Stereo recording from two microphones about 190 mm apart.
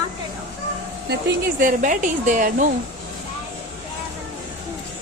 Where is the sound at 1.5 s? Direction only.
45° right (ahead or behind).